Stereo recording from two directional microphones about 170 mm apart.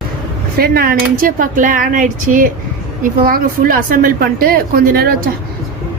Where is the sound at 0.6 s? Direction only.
65° right (ahead or behind).